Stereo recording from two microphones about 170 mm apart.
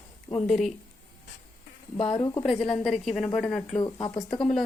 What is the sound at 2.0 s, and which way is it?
Speech, 30° left (ahead or behind).